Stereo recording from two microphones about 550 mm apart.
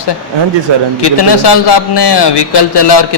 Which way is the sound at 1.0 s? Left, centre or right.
Left.